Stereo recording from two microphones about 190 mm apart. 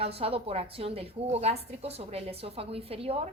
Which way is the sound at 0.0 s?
30° right (ahead or behind).